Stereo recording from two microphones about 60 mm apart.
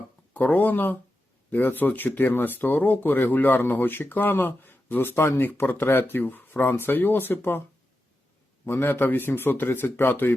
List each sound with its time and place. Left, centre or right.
0.3 s speech: left
8.7 s speech: left